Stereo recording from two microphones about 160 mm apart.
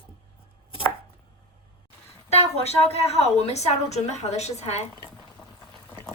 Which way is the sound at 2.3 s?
40° left (ahead or behind).